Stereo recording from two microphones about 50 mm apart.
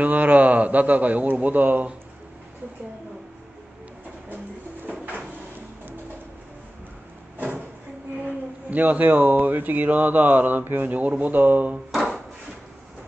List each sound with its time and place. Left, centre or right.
0.0 s a man's voice: right
8.6 s mantra: right
11.9 s wood: centre